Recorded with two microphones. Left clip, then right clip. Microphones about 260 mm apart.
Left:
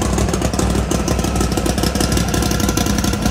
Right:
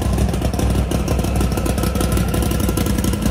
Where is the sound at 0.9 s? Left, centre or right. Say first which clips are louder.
Left 3 dB; left.